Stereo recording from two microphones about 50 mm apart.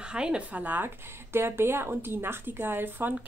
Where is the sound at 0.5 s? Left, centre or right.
Right.